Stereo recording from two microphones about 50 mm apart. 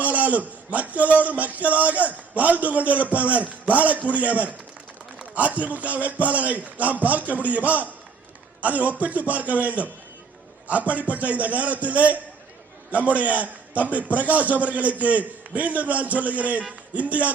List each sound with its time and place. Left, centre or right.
0.0 s a man's voice: right